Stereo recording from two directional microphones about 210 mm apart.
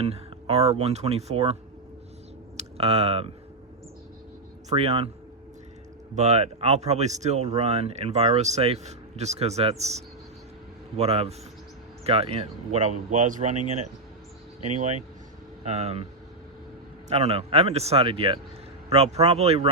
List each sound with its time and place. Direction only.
0.0 s speech: 30° right (ahead or behind)
2.6 s speech: 30° right (ahead or behind)
4.7 s speech: 30° right (ahead or behind)
6.1 s speech: 30° right (ahead or behind)
17.1 s speech: 30° right (ahead or behind)